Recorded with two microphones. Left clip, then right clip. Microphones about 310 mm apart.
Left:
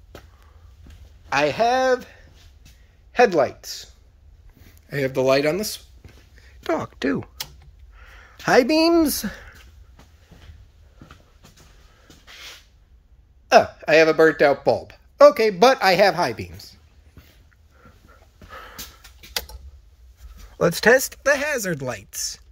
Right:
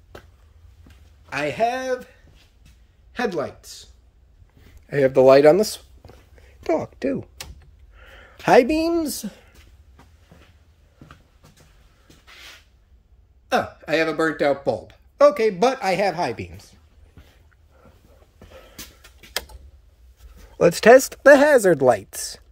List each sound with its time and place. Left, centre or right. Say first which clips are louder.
1.3 s speech: left 4 dB; centre
4.8 s speech: right 6 dB; centre
6.4 s a sound: right 2 dB; centre
7.9 s speech: right 1 dB; centre
13.5 s speech: left 7 dB; centre
20.5 s speech: right 4 dB; centre